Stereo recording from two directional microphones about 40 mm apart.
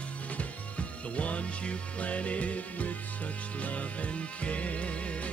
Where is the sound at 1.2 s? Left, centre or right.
Left.